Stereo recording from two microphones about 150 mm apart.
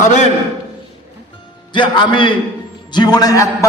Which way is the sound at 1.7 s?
30° left (ahead or behind).